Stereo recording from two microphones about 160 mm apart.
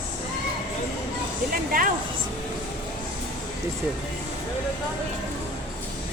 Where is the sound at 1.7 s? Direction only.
60° right (ahead or behind).